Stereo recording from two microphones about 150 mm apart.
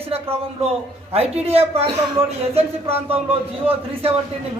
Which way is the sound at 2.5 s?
40° right (ahead or behind).